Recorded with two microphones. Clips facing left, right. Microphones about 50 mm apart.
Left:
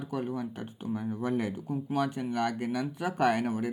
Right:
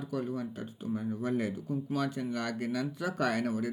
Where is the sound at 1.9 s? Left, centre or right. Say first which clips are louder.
Left 4 dB; left.